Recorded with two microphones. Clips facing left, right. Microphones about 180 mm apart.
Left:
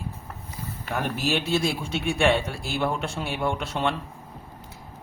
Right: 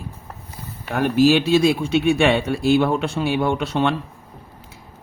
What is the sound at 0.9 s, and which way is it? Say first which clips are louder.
Speech: right 11 dB; 85° right.